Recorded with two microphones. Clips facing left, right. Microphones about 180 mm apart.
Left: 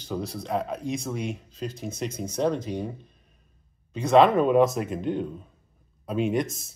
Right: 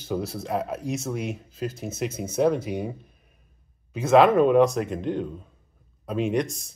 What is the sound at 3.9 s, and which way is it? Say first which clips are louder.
Speech: right 1 dB; 5° right (ahead or behind).